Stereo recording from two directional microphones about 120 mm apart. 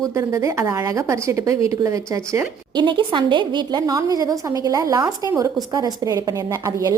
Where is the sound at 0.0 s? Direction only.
30° right (ahead or behind).